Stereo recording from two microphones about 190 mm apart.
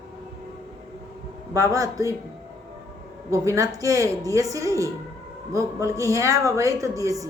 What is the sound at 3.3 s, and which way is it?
Speech, 15° right (ahead or behind).